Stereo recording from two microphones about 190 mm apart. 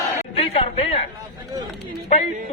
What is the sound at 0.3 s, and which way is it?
Chatter, 30° left (ahead or behind).